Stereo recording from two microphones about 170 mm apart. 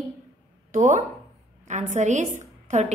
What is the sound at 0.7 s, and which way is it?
A woman's voice, 45° right (ahead or behind).